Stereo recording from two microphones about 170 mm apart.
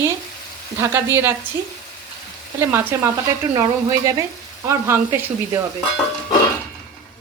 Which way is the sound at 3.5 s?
20° right (ahead or behind).